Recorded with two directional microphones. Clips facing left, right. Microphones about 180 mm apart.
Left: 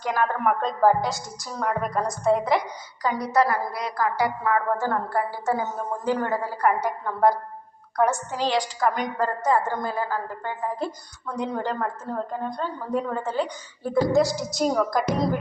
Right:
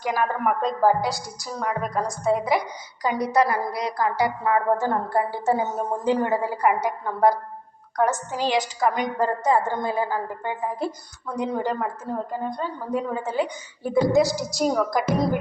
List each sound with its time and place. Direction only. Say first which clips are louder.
0.0 s a woman's voice: even; 10° right (ahead or behind)
3.0 s a woman's voice: right 1 dB; 15° right (ahead or behind)
9.2 s a woman's voice: right 1 dB; 25° right (ahead or behind); by 15.4 s 5° right (ahead or behind)